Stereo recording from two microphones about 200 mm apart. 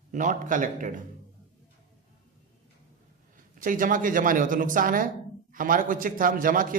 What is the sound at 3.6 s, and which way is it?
A man's voice, 40° right (ahead or behind).